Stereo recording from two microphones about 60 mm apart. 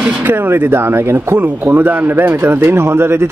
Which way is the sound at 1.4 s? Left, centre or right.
Right.